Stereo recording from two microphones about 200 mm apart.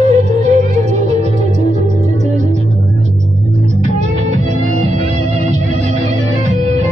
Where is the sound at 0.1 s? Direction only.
35° right (ahead or behind).